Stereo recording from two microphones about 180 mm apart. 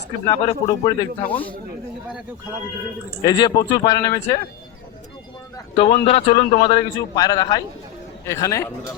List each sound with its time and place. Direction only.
0.3 s a man's voice: 25° left (ahead or behind)
3.2 s a man's voice: 20° left (ahead or behind)
5.7 s a man's voice: 30° left (ahead or behind)